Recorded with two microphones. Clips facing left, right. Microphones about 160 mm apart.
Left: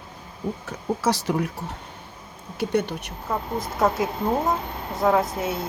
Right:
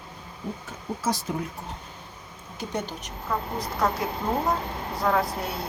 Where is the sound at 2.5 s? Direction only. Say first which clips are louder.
Left 8 dB; 65° left (ahead or behind).